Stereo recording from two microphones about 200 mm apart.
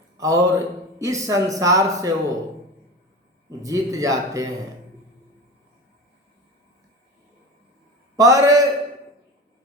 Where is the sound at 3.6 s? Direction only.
15° right (ahead or behind).